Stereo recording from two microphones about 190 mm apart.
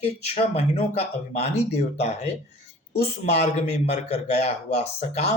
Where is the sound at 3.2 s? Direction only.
35° left (ahead or behind).